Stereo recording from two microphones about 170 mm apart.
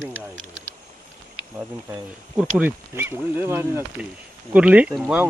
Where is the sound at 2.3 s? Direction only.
10° right (ahead or behind).